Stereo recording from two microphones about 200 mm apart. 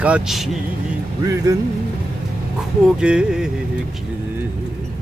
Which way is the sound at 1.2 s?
15° right (ahead or behind).